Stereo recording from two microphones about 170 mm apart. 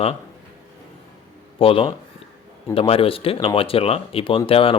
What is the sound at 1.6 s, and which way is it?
Speech, 35° left (ahead or behind).